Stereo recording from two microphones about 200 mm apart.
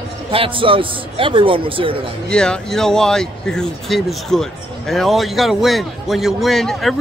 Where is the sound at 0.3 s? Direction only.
25° right (ahead or behind).